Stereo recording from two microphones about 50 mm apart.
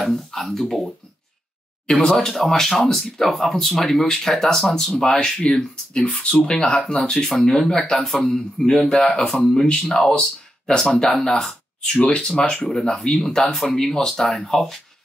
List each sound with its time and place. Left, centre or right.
0.0 s speech: centre
4.9 s speech: centre
7.2 s speech: centre
12.0 s speech: left; by 14.8 s centre